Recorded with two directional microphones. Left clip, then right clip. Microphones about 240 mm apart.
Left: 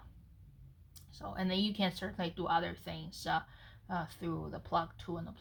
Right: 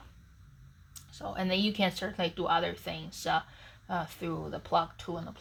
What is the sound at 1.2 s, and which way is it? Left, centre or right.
Speech, centre.